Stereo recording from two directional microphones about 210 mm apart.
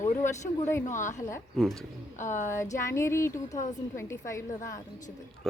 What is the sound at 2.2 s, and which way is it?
Speech, 35° left (ahead or behind).